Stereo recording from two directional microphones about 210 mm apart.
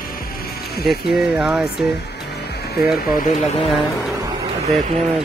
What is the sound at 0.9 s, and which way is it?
Speech, 5° right (ahead or behind).